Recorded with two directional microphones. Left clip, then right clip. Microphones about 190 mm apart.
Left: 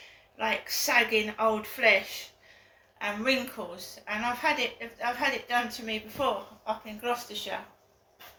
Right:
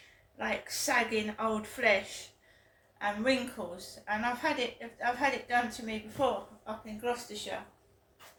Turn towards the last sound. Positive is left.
turn(degrees=-20)  # may be behind; listen again after turning